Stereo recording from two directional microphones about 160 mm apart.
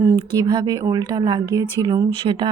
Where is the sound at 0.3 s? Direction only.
25° right (ahead or behind).